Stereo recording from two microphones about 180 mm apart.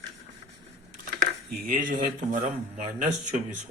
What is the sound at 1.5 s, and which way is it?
Speech, 50° right (ahead or behind).